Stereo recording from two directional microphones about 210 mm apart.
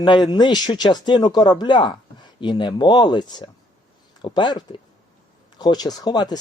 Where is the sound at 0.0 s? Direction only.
20° left (ahead or behind).